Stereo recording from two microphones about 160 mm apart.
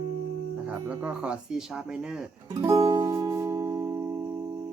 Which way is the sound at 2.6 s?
20° right (ahead or behind).